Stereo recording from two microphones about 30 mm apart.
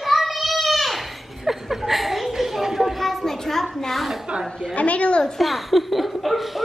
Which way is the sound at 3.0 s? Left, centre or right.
Centre.